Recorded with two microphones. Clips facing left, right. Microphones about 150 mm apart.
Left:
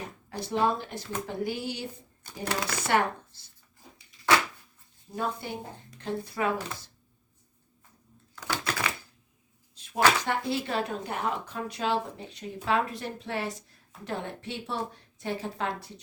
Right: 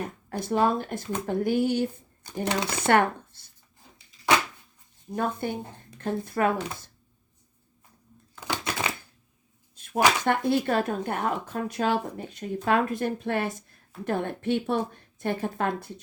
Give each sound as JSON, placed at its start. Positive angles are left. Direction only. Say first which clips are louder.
{"t": 0.3, "sound": "a woman's voice", "louder": "right 3 dB", "side_deg": -50}
{"t": 2.2, "sound": "speech", "louder": "right 4 dB", "side_deg": -20}
{"t": 2.8, "sound": "speech", "louder": "right 5 dB", "side_deg": -55}
{"t": 5.1, "sound": "a woman's voice", "louder": "right 4 dB", "side_deg": -55}
{"t": 8.4, "sound": "typewriter", "louder": "right 1 dB", "side_deg": -20}
{"t": 9.7, "sound": "a sound", "louder": "right 9 dB", "side_deg": -50}
{"t": 10.2, "sound": "a woman's voice", "louder": "right 6 dB", "side_deg": -55}